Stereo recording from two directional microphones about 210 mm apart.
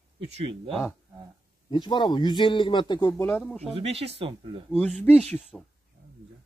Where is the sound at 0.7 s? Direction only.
Centre (ahead or behind).